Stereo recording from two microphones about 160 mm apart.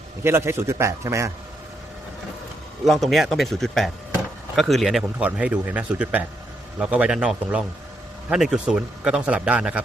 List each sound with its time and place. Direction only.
0.2 s a man's voice: 15° right (ahead or behind)
2.8 s speech: centre (ahead or behind)